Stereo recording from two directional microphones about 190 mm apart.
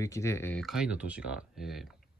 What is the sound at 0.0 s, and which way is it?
Speech, 15° left (ahead or behind).